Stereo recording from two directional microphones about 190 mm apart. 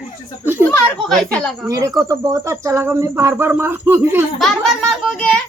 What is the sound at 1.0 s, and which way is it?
Speech, centre (ahead or behind).